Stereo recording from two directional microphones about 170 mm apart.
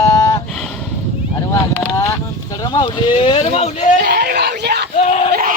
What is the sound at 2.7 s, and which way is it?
Speech, 30° left (ahead or behind).